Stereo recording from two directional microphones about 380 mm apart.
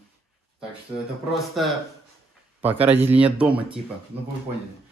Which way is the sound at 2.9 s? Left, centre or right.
Centre.